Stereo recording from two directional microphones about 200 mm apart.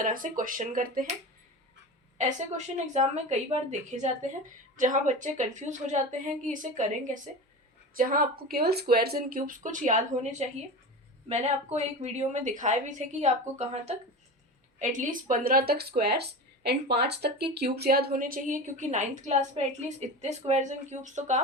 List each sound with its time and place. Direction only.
0.0 s speech: 40° right (ahead or behind)
2.1 s a woman's voice: 35° right (ahead or behind)